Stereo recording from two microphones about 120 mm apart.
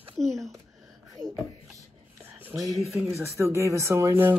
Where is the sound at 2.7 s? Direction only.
5° right (ahead or behind).